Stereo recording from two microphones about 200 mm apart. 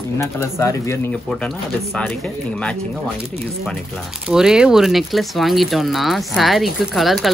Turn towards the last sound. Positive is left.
turn(degrees=0)  # may be behind; listen again after turning